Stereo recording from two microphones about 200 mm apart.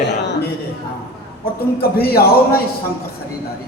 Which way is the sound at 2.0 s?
50° left (ahead or behind).